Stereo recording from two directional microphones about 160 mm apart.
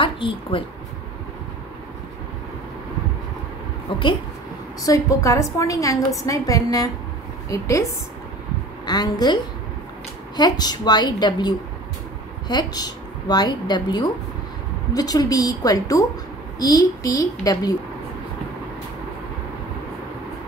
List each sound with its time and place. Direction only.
0.0 s a woman's voice: 30° left (ahead or behind)
3.9 s a woman's voice: 30° left (ahead or behind)
4.8 s a woman's voice: 20° left (ahead or behind)
8.8 s a woman's voice: 25° left (ahead or behind)